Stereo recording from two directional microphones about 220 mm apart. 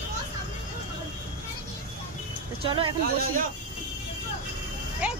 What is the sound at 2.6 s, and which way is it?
Speech, 25° right (ahead or behind).